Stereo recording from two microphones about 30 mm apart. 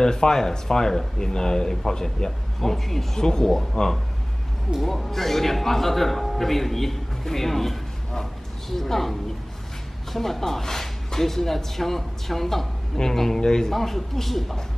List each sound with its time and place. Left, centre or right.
0.0 s a man's voice: left
3.2 s speech: left
4.8 s a man's voice: centre
10.1 s a man's voice: centre
13.4 s speech: left
13.7 s a man's voice: centre